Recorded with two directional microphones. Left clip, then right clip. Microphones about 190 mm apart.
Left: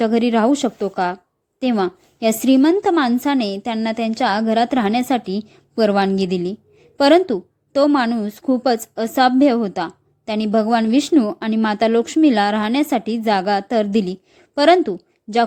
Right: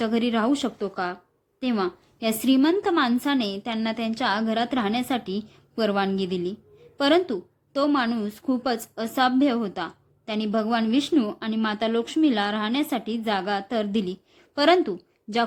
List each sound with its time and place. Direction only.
0.0 s a woman's voice: 30° left (ahead or behind)